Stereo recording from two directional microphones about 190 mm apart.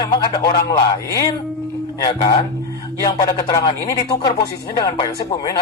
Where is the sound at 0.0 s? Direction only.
20° left (ahead or behind).